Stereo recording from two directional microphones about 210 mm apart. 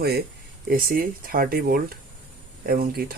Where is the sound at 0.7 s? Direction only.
45° right (ahead or behind).